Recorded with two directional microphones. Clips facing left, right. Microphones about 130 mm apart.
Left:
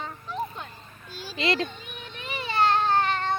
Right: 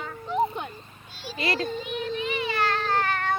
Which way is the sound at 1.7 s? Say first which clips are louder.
Right 12 dB; 35° right (ahead or behind).